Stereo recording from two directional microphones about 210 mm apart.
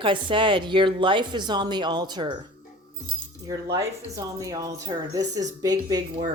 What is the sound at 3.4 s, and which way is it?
Speech, 15° right (ahead or behind).